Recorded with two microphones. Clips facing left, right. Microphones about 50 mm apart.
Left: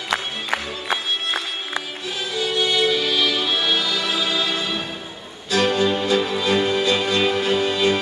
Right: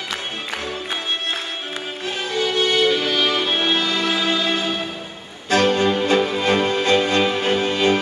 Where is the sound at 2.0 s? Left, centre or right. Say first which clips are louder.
Right 5 dB; right.